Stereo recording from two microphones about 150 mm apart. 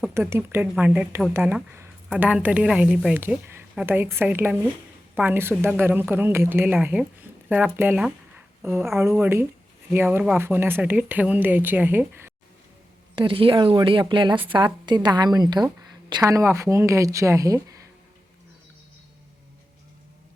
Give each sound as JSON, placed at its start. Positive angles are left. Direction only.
{"t": 0.1, "sound": "a woman's voice", "side_deg": -15}
{"t": 13.1, "sound": "a woman's voice", "side_deg": -35}